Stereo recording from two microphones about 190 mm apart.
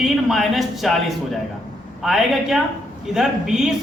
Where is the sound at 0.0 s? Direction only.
Centre (ahead or behind).